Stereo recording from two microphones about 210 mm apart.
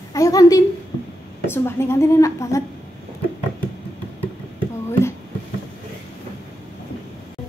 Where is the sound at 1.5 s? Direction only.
10° left (ahead or behind).